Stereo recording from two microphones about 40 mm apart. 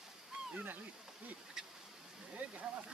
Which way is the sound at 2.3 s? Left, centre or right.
Right.